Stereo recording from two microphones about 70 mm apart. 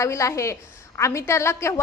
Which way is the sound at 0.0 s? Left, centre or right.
Left.